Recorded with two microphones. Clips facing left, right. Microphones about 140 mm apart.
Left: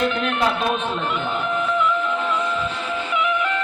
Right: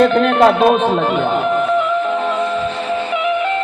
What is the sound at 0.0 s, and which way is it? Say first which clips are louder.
Speech: right 10 dB; 70° right (ahead or behind).